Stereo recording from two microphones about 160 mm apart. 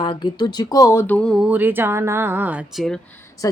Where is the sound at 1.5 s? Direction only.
10° right (ahead or behind).